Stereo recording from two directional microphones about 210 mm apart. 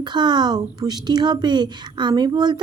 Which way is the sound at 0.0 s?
20° right (ahead or behind).